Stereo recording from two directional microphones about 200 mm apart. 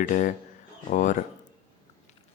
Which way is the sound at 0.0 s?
40° left (ahead or behind).